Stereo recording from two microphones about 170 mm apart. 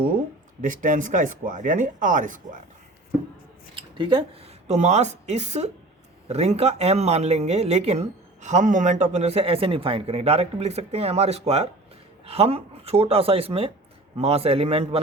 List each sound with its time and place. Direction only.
0.6 s speech: 50° right (ahead or behind)
3.8 s a sound: 30° right (ahead or behind)
4.7 s speech: 40° right (ahead or behind)